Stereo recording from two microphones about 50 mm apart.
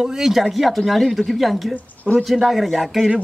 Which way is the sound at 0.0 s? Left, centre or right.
Centre.